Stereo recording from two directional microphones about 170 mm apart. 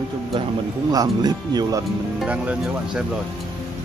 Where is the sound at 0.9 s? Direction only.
20° right (ahead or behind).